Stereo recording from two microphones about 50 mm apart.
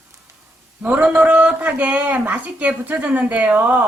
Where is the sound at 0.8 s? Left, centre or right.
Right.